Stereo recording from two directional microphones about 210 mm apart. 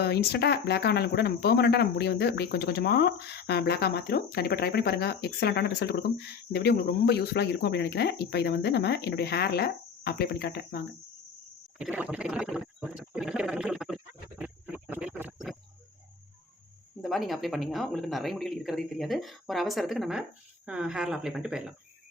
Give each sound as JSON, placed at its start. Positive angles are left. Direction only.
{"t": 0.0, "sound": "speech", "side_deg": 50}
{"t": 11.8, "sound": "a sound", "side_deg": -5}
{"t": 17.0, "sound": "speech", "side_deg": 0}